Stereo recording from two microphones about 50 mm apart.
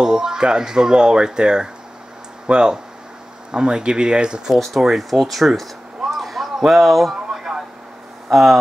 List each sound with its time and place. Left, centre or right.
0.0 s speech: centre
4.8 s a sound: centre
8.3 s speech: centre